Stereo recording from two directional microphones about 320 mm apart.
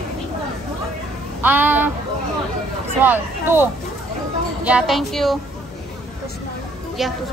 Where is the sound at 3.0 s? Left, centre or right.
Centre.